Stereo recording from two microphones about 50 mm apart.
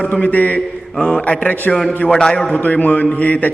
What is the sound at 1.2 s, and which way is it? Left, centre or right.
Speech, left.